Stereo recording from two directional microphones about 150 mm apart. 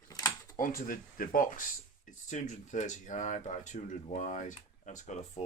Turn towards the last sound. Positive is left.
turn(degrees=55)  # may be behind; listen again after turning